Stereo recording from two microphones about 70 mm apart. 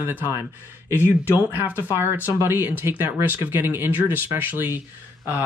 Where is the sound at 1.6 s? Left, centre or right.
Right.